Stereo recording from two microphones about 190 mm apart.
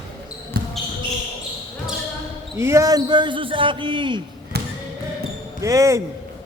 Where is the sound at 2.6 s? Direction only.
15° right (ahead or behind).